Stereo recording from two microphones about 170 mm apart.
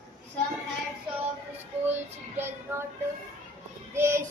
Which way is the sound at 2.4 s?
15° right (ahead or behind).